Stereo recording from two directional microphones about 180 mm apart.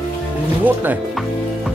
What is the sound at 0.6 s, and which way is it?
Speech, 10° right (ahead or behind).